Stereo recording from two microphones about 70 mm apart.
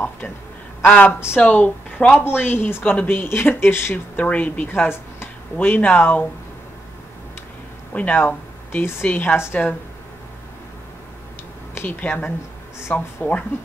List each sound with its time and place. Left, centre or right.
0.8 s speech: left
2.2 s speech: left
4.2 s speech: left
7.9 s speech: left
11.7 s a woman's voice: left